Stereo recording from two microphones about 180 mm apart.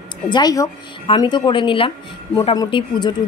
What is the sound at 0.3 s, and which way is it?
Speech, 20° left (ahead or behind).